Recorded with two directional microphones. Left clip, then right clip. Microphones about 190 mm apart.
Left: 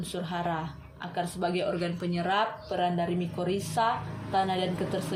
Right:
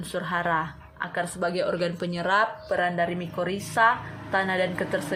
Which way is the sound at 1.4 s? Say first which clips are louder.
Right 4 dB; 40° right (ahead or behind).